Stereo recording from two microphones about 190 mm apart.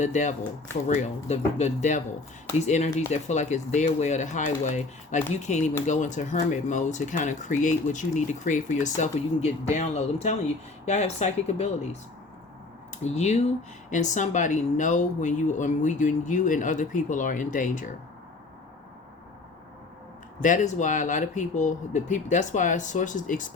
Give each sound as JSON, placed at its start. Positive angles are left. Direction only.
{"t": 0.0, "sound": "speech", "side_deg": 40}
{"t": 1.5, "sound": "speech", "side_deg": 40}
{"t": 13.1, "sound": "speech", "side_deg": 35}
{"t": 20.4, "sound": "speech", "side_deg": 40}